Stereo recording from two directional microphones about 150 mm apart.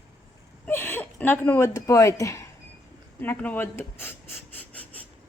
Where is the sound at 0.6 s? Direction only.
15° left (ahead or behind).